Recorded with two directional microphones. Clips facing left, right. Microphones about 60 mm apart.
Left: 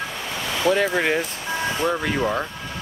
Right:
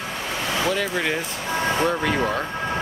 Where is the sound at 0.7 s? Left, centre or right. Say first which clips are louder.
Left 7 dB; centre.